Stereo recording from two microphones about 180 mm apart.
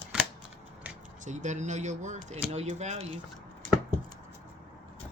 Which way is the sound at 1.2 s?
40° right (ahead or behind).